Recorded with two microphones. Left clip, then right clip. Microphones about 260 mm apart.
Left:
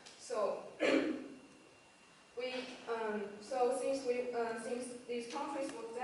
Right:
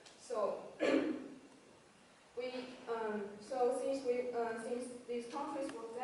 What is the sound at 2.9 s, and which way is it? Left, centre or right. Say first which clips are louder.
Speech: left 1 dB; centre.